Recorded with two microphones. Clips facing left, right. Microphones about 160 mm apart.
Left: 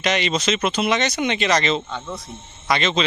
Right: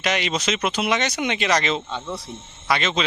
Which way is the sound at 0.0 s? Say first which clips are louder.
Left 2 dB; 10° right (ahead or behind).